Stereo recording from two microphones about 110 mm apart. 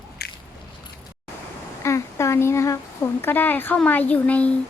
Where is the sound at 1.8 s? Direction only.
25° left (ahead or behind).